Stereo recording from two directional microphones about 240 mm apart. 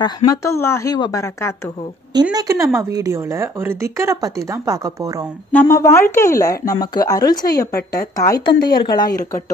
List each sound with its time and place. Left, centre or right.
0.0 s speech: centre
2.3 s speech: centre
5.5 s speech: centre
7.7 s a woman's voice: left
8.3 s speech: centre